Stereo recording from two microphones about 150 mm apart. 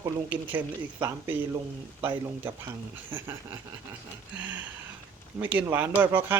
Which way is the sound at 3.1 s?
15° right (ahead or behind).